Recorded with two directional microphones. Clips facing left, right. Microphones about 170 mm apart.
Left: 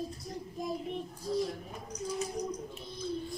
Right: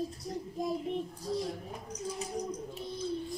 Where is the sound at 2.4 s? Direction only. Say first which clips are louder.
Even; 30° right (ahead or behind).